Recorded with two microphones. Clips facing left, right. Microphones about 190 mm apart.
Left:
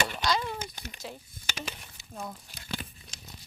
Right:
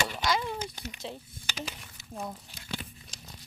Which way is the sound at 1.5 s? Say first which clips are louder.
Even; 55° left (ahead or behind).